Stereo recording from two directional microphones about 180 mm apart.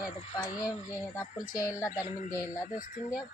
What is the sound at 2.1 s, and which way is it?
A man's voice, 50° left (ahead or behind).